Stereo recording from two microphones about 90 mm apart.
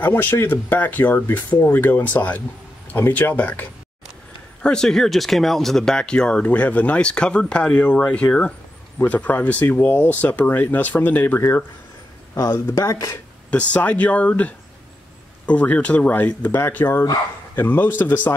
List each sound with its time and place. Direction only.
0.0 s speech: 20° left (ahead or behind)
4.6 s speech: 5° left (ahead or behind)
12.4 s speech: 35° left (ahead or behind)
13.5 s speech: 15° left (ahead or behind)